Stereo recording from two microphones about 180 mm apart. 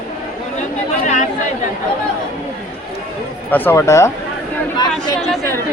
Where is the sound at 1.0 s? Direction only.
40° left (ahead or behind).